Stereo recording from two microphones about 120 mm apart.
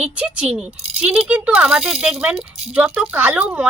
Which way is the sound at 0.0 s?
10° right (ahead or behind).